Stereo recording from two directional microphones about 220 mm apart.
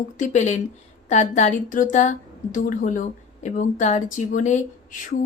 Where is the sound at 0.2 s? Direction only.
35° left (ahead or behind).